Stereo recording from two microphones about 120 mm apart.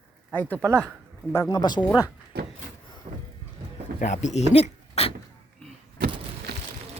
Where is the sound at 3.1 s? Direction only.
55° right (ahead or behind).